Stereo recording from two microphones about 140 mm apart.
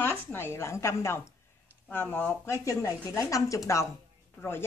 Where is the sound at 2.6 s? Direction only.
25° left (ahead or behind).